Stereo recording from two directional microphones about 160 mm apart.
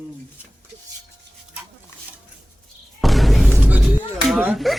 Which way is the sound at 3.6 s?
5° right (ahead or behind).